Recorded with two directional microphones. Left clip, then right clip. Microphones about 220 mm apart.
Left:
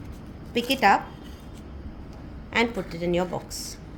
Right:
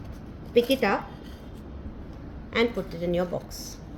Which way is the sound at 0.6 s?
50° left (ahead or behind).